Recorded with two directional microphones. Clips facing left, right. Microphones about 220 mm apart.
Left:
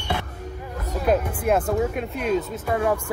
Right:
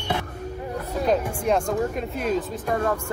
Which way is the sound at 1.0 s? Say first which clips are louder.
Left 1 dB; 5° left (ahead or behind).